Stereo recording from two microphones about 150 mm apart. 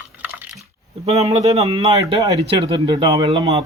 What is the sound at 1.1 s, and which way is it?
A man's voice, 45° right (ahead or behind).